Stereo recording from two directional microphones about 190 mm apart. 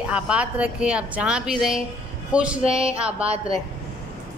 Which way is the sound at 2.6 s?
30° right (ahead or behind).